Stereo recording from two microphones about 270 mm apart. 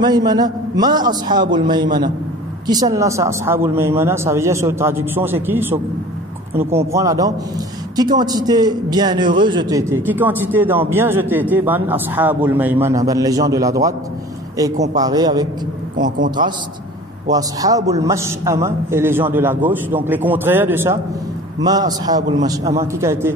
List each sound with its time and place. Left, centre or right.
0.0 s a man's voice: centre
17.3 s a man's voice: centre